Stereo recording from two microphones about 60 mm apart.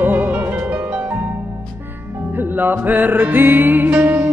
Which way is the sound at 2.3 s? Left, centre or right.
Right.